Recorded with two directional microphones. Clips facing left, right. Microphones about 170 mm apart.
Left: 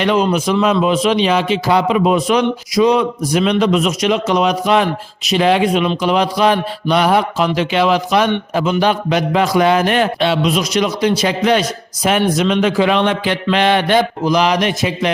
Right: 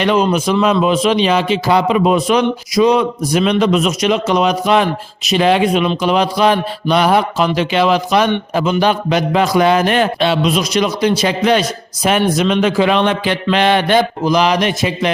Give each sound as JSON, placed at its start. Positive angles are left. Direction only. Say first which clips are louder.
{"t": 0.0, "sound": "speech", "louder": "right 1 dB", "side_deg": -25}